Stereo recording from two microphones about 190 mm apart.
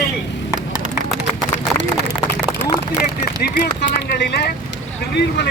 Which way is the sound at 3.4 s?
60° left (ahead or behind).